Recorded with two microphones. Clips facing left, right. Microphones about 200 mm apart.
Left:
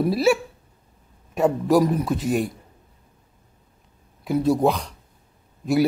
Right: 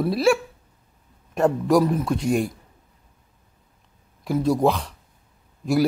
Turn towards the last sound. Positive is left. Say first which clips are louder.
# left 1 dB
turn(degrees=0)  # may be behind; listen again after turning